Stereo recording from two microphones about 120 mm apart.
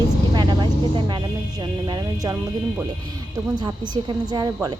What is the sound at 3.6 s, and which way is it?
Speech, 35° right (ahead or behind).